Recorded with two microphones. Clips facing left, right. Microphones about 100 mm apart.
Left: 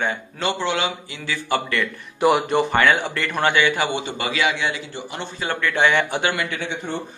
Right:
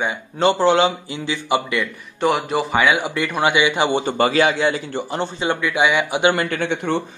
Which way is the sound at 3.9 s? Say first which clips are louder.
Right 7 dB; 40° right (ahead or behind).